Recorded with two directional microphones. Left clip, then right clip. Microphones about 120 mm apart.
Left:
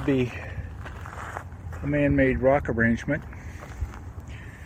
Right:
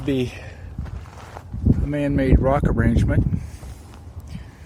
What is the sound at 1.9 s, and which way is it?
Speech, 30° right (ahead or behind).